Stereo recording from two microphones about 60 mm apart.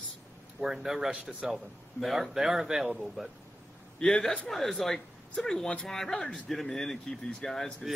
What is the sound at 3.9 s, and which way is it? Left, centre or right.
Speech, centre.